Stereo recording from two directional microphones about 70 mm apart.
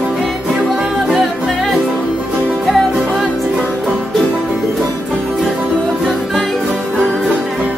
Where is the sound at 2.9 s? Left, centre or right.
Centre.